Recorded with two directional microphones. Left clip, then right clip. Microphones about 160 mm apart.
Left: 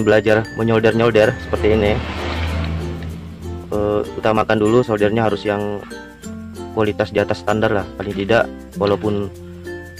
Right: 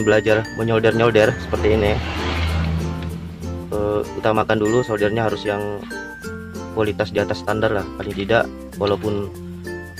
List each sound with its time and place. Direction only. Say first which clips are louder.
0.0 s speech: left 2 dB; 15° left (ahead or behind)
3.7 s speech: left 2 dB; 15° left (ahead or behind)
6.8 s speech: left 3 dB; 15° left (ahead or behind)